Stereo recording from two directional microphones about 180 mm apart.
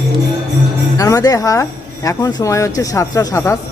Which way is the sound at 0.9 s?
20° left (ahead or behind).